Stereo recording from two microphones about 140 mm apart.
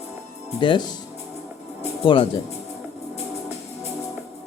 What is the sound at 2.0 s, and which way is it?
Speech, 35° left (ahead or behind).